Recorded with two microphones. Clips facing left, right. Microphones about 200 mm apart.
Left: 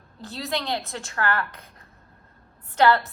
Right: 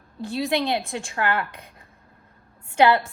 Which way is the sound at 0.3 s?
15° right (ahead or behind).